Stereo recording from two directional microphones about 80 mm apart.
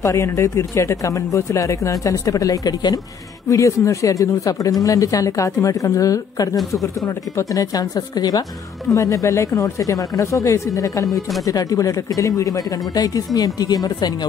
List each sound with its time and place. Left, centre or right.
0.0 s speech: left
3.4 s speech: left
8.9 s speech: left